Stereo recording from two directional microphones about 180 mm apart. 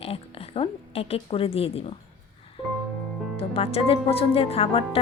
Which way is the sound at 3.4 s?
30° left (ahead or behind).